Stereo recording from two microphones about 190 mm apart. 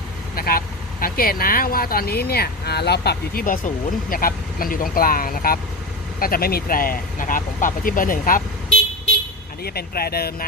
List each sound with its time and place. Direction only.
0.3 s speech: 50° left (ahead or behind)
9.6 s speech: 55° left (ahead or behind)